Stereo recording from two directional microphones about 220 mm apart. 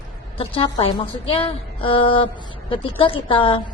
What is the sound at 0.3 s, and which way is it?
A woman's voice, 25° left (ahead or behind).